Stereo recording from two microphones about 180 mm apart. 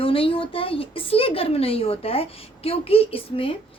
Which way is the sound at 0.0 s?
30° left (ahead or behind).